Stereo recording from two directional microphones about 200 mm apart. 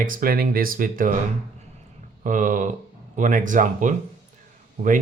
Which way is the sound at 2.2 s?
40° right (ahead or behind).